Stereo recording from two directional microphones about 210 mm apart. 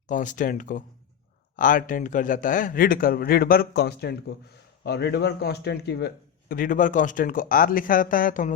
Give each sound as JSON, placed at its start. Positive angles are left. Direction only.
{"t": 0.1, "sound": "a man's voice", "side_deg": 40}